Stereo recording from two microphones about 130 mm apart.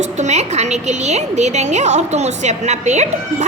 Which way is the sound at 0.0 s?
60° right (ahead or behind).